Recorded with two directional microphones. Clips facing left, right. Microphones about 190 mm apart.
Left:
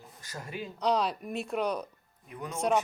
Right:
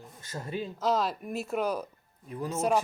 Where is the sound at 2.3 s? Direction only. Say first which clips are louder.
Right 5 dB; 30° right (ahead or behind).